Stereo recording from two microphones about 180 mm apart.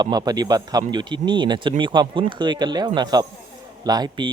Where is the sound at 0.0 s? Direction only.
20° right (ahead or behind).